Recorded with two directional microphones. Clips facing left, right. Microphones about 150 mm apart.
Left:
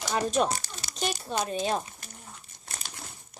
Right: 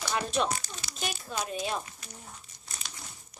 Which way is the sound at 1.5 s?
35° left (ahead or behind).